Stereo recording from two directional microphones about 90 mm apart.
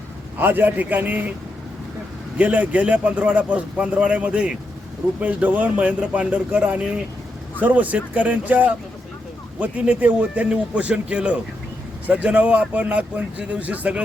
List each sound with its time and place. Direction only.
0.3 s a man's voice: 20° right (ahead or behind)
2.4 s a man's voice: 15° right (ahead or behind)